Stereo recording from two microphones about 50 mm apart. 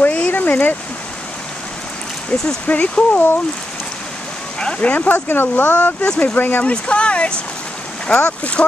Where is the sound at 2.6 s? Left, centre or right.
Left.